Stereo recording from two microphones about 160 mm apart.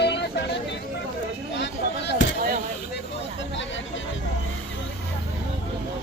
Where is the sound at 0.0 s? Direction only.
90° left.